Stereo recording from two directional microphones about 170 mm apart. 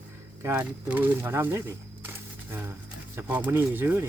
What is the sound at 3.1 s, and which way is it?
Speech, 10° right (ahead or behind).